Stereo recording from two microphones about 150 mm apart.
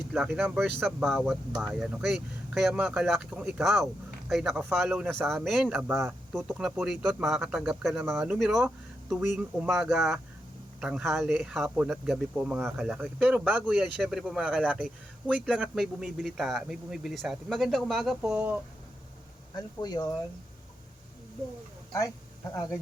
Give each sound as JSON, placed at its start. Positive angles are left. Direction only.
{"t": 0.1, "sound": "speech", "side_deg": -5}
{"t": 0.8, "sound": "speech", "side_deg": 0}
{"t": 19.5, "sound": "speech", "side_deg": 25}